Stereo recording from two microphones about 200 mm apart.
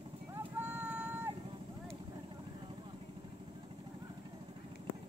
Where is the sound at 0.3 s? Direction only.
10° right (ahead or behind).